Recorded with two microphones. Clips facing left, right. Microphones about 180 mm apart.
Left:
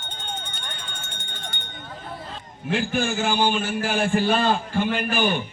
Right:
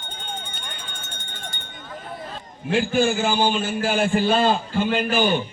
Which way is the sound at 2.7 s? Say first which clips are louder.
Right 4 dB; 15° left (ahead or behind).